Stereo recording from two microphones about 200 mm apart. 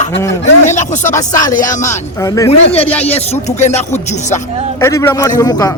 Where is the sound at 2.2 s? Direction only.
15° left (ahead or behind).